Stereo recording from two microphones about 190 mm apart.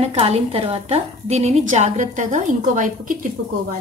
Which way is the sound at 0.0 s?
30° right (ahead or behind).